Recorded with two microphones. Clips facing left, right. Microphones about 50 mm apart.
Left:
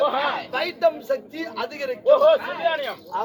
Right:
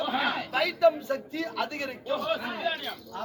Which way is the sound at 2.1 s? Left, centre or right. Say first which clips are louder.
Left 15 dB; left.